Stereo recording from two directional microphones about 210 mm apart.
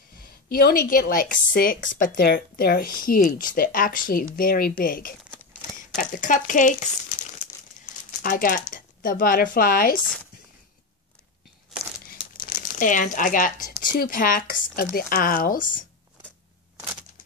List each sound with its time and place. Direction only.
0.2 s a woman's voice: 45° left (ahead or behind)
8.2 s speech: 40° left (ahead or behind)
12.1 s crumpling: 45° left (ahead or behind)
13.9 s a woman's voice: 40° left (ahead or behind)